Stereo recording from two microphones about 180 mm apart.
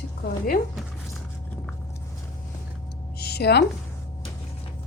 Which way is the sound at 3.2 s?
65° left (ahead or behind).